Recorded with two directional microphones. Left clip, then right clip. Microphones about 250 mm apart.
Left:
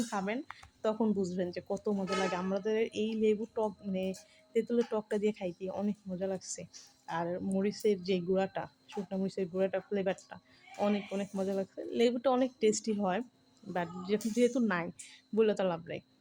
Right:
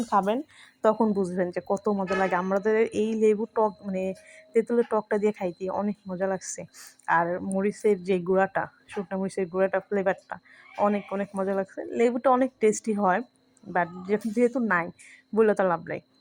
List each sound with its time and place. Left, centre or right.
0.8 s speech: centre